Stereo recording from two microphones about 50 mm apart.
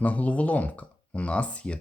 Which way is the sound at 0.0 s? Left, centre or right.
Left.